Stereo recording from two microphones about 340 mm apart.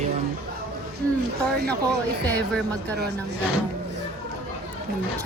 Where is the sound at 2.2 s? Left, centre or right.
Centre.